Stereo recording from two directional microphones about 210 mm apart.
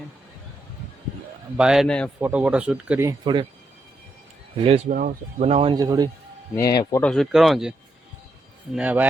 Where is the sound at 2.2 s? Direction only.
10° right (ahead or behind).